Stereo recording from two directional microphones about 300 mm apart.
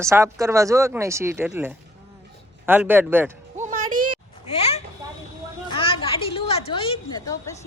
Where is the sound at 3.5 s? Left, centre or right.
Right.